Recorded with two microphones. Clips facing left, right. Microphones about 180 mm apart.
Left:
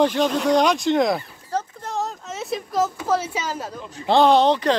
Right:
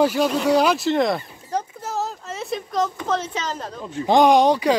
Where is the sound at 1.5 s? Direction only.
15° right (ahead or behind).